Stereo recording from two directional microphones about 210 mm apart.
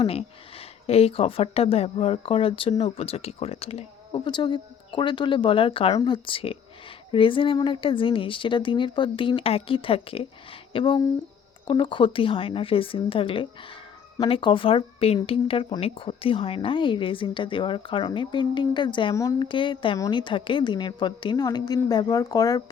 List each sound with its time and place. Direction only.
0.0 s speech: 30° left (ahead or behind)